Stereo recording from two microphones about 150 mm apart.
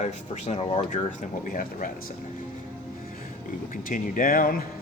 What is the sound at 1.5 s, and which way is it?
Speech, 65° left (ahead or behind).